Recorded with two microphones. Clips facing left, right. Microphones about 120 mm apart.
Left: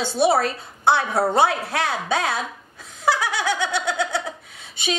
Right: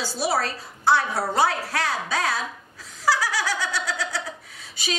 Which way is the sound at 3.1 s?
25° left (ahead or behind).